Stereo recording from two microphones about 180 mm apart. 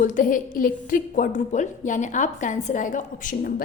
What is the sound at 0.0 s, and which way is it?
A woman's voice, 45° left (ahead or behind).